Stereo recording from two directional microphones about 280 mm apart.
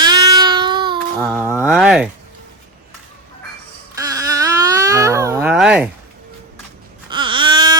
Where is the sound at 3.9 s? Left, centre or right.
Centre.